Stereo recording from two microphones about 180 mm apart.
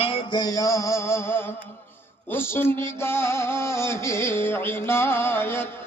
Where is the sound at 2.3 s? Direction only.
10° left (ahead or behind).